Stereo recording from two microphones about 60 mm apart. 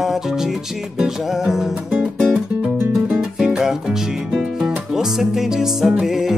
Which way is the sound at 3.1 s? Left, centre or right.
Centre.